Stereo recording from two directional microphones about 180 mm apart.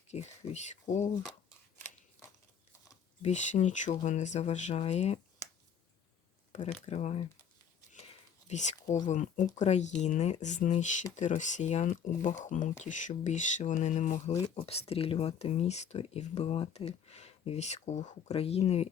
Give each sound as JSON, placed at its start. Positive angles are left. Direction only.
{"t": 0.1, "sound": "speech", "side_deg": 40}
{"t": 3.2, "sound": "speech", "side_deg": 40}
{"t": 6.5, "sound": "speech", "side_deg": 40}
{"t": 8.4, "sound": "speech", "side_deg": 40}